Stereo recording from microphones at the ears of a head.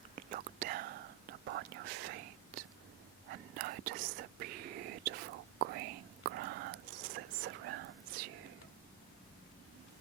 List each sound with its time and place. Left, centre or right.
0.2 s whispering: right